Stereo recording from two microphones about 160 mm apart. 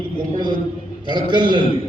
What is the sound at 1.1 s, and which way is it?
Speech, 30° right (ahead or behind).